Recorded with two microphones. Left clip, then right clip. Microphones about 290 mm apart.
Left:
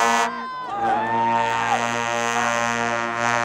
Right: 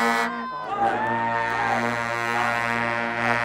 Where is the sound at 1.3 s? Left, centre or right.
Left.